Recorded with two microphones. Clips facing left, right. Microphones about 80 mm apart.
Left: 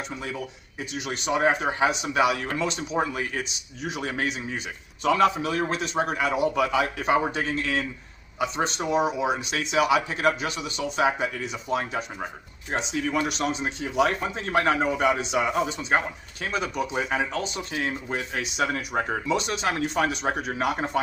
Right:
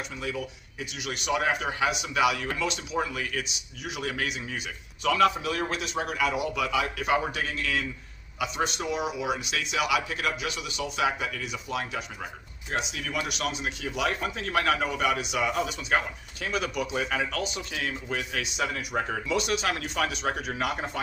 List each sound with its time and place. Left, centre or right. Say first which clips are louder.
0.8 s a man's voice: left 3 dB; left
18.5 s a man's voice: left 4 dB; left